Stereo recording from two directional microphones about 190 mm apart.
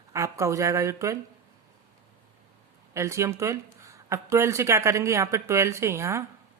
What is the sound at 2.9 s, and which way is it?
Speech, 15° right (ahead or behind).